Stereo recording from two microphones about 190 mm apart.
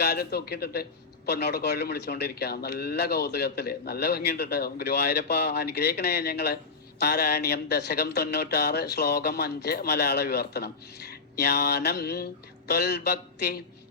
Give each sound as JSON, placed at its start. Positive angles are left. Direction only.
{"t": 0.0, "sound": "a man's voice", "side_deg": 55}